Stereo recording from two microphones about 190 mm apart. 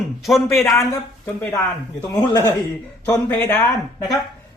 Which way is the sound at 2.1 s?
20° left (ahead or behind).